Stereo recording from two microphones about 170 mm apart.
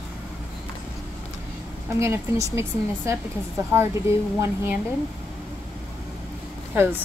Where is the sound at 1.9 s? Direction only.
15° right (ahead or behind).